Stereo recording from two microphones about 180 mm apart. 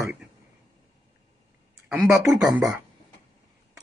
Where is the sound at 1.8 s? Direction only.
Centre (ahead or behind).